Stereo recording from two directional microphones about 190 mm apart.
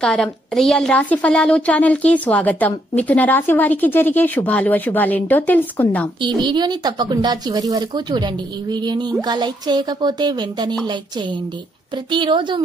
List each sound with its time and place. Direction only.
0.0 s a woman's voice: 5° left (ahead or behind)
6.2 s speech: 25° right (ahead or behind)
12.1 s speech: 25° right (ahead or behind)